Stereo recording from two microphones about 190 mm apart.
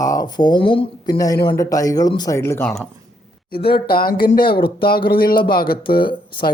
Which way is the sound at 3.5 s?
55° left (ahead or behind).